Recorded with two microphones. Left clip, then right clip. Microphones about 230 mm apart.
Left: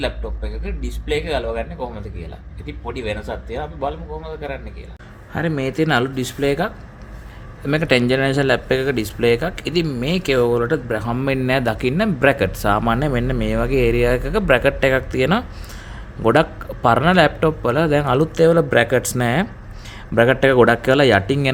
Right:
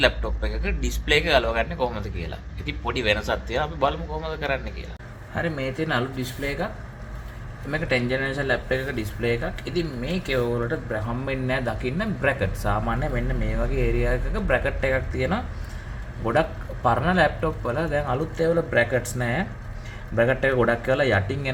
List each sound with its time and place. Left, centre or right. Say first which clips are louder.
0.0 s a man's voice: right 4 dB; centre
5.3 s speech: left 5 dB; left
7.7 s speech: left 7 dB; left